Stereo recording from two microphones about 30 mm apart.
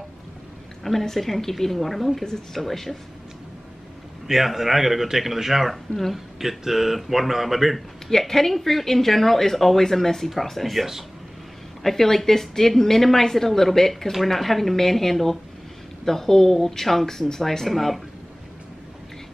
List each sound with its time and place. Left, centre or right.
1.0 s a woman's voice: centre
4.3 s a woman's voice: centre
8.1 s a woman's voice: centre